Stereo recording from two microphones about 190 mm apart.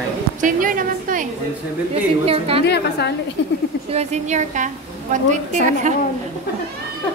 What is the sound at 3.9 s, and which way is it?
A woman's voice, 35° right (ahead or behind).